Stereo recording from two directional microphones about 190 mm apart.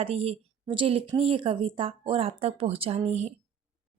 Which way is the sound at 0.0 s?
30° right (ahead or behind).